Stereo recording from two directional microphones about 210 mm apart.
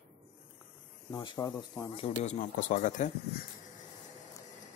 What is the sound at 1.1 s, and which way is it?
Speech, 20° left (ahead or behind).